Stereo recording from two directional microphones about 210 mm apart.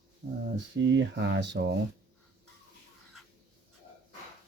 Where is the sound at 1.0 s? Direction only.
55° right (ahead or behind).